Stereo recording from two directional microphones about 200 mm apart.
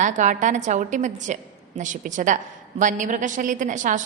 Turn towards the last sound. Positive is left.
turn(degrees=-40)  # may be behind; listen again after turning